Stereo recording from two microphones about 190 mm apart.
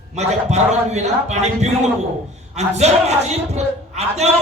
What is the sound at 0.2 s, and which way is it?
A man's voice, 35° right (ahead or behind).